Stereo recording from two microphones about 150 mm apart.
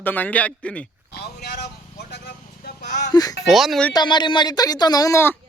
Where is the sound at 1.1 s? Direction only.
90° left.